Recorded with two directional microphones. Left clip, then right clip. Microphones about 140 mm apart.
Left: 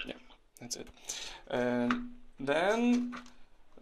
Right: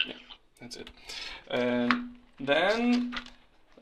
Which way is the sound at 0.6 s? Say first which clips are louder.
Left 2 dB; 50° left (ahead or behind).